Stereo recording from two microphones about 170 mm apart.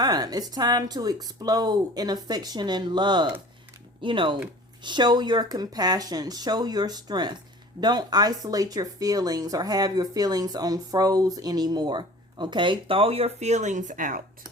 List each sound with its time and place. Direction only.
0.0 s speech: 25° right (ahead or behind); by 14.2 s 50° right (ahead or behind)